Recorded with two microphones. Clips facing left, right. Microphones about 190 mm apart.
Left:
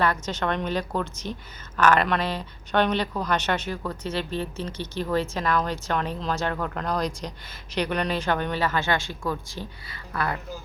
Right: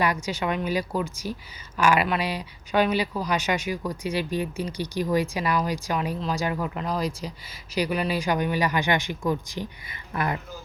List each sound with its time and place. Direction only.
0.0 s a woman's voice: 10° right (ahead or behind)